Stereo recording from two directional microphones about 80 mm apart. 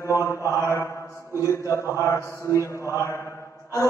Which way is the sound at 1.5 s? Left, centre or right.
Left.